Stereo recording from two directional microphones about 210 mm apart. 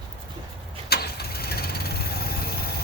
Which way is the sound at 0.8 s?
50° left (ahead or behind).